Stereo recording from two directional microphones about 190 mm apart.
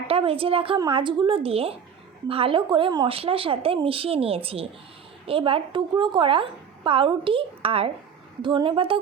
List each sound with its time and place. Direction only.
0.1 s a woman's voice: 30° right (ahead or behind)